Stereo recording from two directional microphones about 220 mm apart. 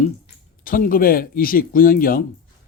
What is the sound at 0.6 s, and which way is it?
A man's voice, 40° left (ahead or behind).